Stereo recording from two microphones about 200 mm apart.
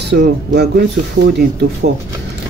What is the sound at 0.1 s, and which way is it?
Speech, 55° right (ahead or behind).